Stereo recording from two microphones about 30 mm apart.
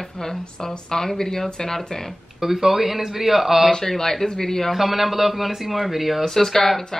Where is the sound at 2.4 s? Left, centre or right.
Centre.